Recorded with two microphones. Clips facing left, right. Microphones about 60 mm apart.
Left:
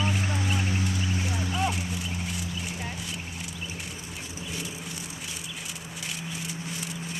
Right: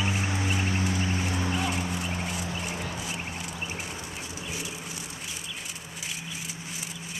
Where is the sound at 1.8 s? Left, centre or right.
Right.